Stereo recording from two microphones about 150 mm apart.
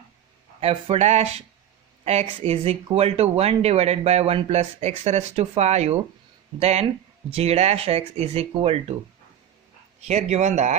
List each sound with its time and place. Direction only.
0.6 s speech: 40° right (ahead or behind)
10.1 s speech: 45° right (ahead or behind)